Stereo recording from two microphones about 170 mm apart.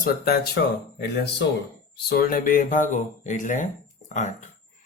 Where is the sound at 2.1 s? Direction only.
60° left (ahead or behind).